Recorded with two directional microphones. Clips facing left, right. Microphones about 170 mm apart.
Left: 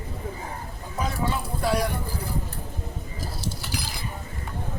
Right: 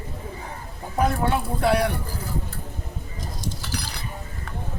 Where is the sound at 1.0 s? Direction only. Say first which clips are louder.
Right 6 dB; 60° right (ahead or behind).